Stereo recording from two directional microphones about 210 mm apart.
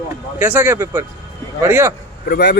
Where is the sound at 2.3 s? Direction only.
50° left (ahead or behind).